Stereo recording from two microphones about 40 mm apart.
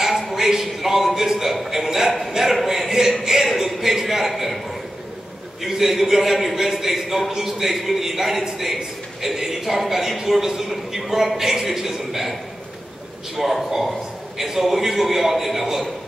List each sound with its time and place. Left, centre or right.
0.2 s a sound: centre
0.5 s a man's voice: centre
5.6 s a man's voice: centre
13.4 s a man's voice: centre